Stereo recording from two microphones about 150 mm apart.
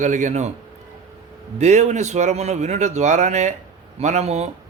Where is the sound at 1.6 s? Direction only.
50° right (ahead or behind).